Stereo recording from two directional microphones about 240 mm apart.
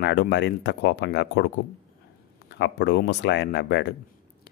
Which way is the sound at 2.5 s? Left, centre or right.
Left.